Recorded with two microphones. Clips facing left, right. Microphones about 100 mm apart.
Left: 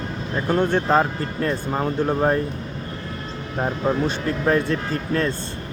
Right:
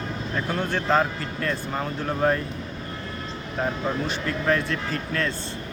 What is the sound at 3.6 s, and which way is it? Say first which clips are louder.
Speech: left 5 dB; 20° left (ahead or behind).